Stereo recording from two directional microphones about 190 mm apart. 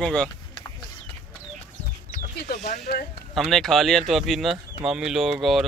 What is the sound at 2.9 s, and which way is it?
Speech, 55° left (ahead or behind).